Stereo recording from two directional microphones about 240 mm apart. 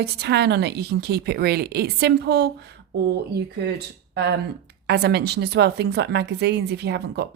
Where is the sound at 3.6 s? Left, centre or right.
Right.